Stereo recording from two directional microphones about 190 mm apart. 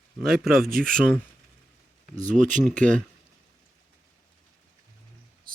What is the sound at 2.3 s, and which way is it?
Speech, 40° right (ahead or behind).